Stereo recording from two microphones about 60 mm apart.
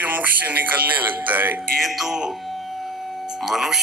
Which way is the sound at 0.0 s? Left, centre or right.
Right.